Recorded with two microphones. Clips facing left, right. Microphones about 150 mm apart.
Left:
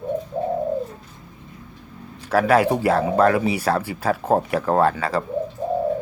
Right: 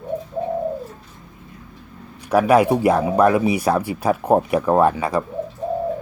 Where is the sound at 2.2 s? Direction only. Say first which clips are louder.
Right 2 dB; 15° right (ahead or behind).